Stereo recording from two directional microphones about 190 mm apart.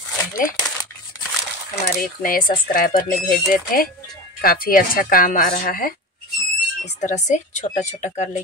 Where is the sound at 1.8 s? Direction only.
50° left (ahead or behind).